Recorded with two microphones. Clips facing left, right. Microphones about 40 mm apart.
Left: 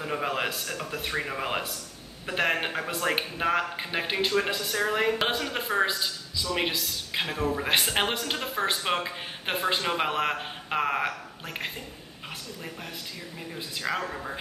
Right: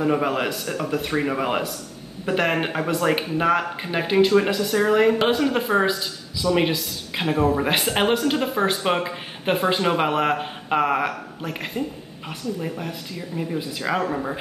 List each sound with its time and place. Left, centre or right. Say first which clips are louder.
0.0 s speech: right 7 dB; centre
2.2 s speech: right 5 dB; centre